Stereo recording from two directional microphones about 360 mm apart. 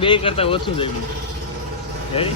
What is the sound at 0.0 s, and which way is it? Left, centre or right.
Speech, centre.